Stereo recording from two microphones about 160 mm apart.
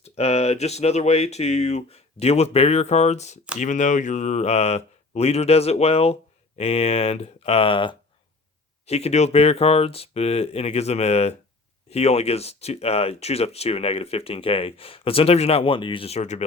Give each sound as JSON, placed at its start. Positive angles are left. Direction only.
{"t": 0.0, "sound": "speech", "side_deg": 40}